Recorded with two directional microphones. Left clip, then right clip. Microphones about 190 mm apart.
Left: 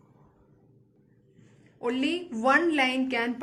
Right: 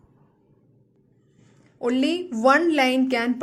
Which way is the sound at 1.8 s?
40° right (ahead or behind).